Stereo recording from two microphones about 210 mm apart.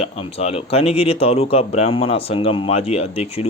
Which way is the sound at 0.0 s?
30° left (ahead or behind).